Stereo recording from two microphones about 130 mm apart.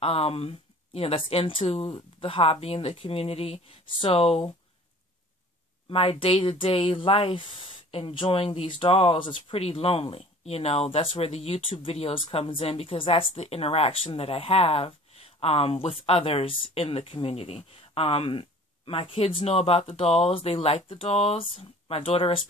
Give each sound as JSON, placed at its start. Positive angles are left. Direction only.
{"t": 0.0, "sound": "speech", "side_deg": 50}
{"t": 5.9, "sound": "speech", "side_deg": 45}